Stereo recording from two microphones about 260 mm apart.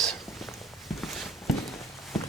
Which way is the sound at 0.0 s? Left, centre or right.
Centre.